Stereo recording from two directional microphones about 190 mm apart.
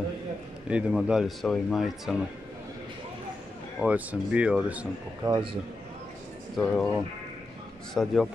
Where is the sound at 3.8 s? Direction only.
5° right (ahead or behind).